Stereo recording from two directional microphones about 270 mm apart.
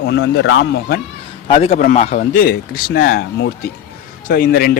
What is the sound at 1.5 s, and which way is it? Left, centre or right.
A man's voice, left.